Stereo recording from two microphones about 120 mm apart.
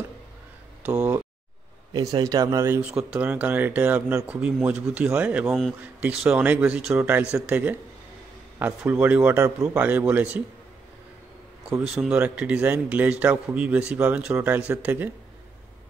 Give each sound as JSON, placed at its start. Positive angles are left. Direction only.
{"t": 2.0, "sound": "speech", "side_deg": -30}
{"t": 2.8, "sound": "speech", "side_deg": -10}
{"t": 11.8, "sound": "speech", "side_deg": -5}